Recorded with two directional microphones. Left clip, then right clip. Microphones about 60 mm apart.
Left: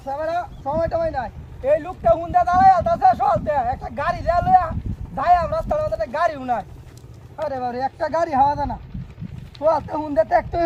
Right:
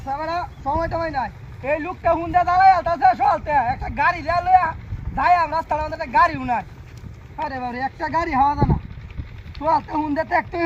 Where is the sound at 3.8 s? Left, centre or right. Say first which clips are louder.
Right 2 dB; left.